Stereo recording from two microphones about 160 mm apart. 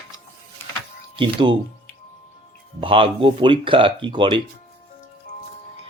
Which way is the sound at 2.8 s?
35° right (ahead or behind).